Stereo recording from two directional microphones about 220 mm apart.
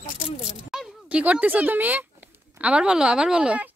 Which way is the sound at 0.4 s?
5° right (ahead or behind).